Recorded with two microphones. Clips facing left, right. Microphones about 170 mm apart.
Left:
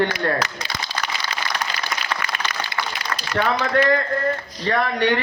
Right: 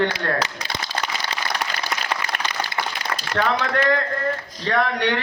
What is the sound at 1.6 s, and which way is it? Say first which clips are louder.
Applause: even; 30° right (ahead or behind).